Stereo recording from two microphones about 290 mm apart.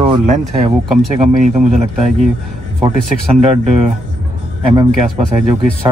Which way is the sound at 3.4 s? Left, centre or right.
Right.